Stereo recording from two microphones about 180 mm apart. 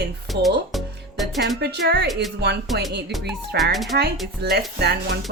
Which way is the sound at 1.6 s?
65° right (ahead or behind).